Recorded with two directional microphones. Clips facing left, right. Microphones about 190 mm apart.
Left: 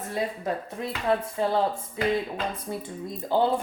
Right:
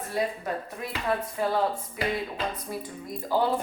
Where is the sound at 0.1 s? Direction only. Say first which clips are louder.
Even; 25° left (ahead or behind).